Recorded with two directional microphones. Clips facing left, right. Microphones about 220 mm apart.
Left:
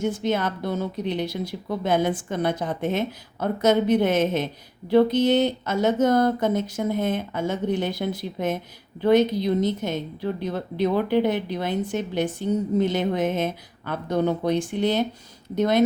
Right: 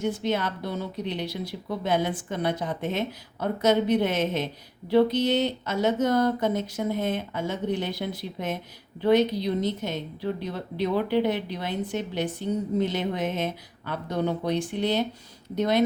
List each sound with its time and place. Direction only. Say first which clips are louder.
0.0 s speech: left 3 dB; 50° left (ahead or behind)